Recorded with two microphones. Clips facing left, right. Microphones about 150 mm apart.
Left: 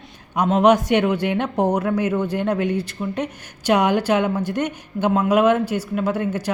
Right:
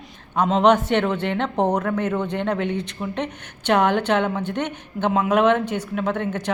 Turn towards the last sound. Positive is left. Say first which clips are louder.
# left 2 dB
turn(degrees=10)  # may be behind; listen again after turning